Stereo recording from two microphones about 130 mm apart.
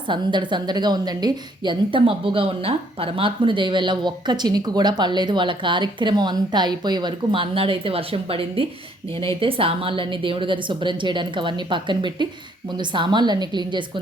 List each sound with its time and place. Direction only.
0.1 s a woman's voice: 35° right (ahead or behind)